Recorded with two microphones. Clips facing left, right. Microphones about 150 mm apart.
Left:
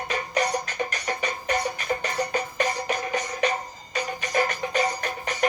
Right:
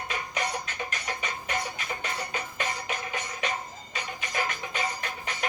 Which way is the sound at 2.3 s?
40° left (ahead or behind).